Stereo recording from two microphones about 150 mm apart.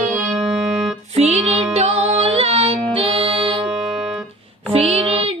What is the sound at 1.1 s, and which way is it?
Music, 45° right (ahead or behind).